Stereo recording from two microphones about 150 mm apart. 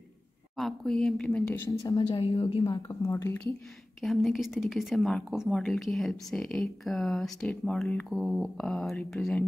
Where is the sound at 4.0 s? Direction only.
Centre (ahead or behind).